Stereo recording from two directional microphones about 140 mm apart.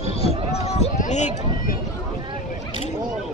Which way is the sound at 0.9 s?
60° left (ahead or behind).